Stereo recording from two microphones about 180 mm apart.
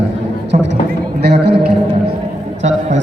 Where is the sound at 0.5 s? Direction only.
45° right (ahead or behind).